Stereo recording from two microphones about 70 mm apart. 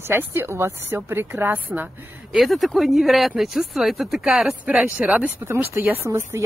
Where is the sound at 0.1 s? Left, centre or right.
Right.